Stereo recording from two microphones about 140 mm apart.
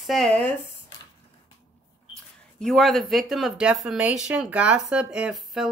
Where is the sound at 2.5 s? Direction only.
Centre (ahead or behind).